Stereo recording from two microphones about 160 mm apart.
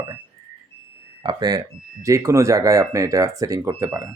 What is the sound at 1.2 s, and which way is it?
Speech, 25° right (ahead or behind).